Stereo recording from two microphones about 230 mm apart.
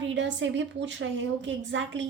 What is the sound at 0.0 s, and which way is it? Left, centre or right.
A woman's voice, right.